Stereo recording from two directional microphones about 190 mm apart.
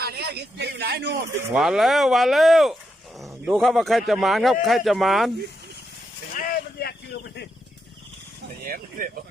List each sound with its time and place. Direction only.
0.0 s a sound: 60° right (ahead or behind)
1.5 s speech: centre (ahead or behind)
6.3 s vehicle: 55° left (ahead or behind)
8.6 s vehicle: 45° right (ahead or behind)